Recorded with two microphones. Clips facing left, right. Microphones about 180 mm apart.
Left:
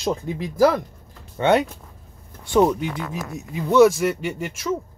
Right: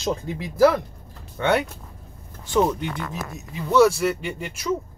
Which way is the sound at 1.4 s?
20° left (ahead or behind).